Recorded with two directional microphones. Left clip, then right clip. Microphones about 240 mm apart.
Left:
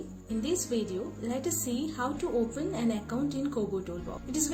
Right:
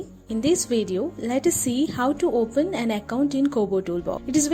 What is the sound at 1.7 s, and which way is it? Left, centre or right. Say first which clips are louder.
Speech: right 9 dB; right.